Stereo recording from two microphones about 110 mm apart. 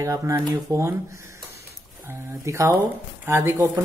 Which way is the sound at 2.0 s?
25° right (ahead or behind).